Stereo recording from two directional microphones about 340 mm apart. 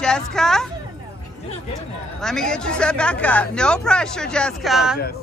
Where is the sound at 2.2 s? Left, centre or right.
Centre.